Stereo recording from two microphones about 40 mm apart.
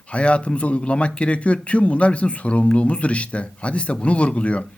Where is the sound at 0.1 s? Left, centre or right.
Left.